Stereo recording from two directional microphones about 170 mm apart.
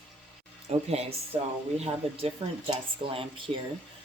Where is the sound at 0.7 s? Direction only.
40° right (ahead or behind).